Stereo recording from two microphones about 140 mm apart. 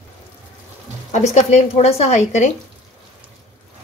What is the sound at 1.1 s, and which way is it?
A woman's voice, 55° left (ahead or behind).